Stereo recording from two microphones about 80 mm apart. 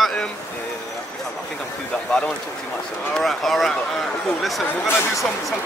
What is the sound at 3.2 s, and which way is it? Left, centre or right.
A man's voice, centre.